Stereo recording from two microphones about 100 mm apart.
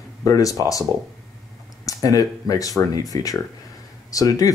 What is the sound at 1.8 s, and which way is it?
Speech, 35° left (ahead or behind).